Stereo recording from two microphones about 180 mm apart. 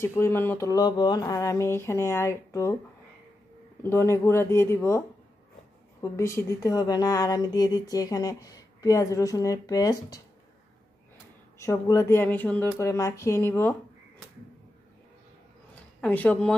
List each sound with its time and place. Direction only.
0.0 s speech: 15° left (ahead or behind)
3.8 s speech: 15° left (ahead or behind)
11.5 s speech: 15° left (ahead or behind)
15.7 s a sound: 10° left (ahead or behind)